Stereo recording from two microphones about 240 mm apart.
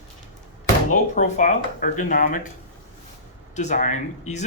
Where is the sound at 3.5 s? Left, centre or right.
Left.